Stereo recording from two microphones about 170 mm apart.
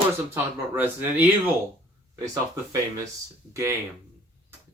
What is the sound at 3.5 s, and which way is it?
Speech, 15° right (ahead or behind).